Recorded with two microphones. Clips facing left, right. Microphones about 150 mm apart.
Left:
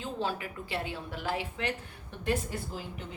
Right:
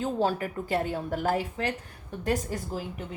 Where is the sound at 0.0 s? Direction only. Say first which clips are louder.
Right 7 dB; 45° right (ahead or behind).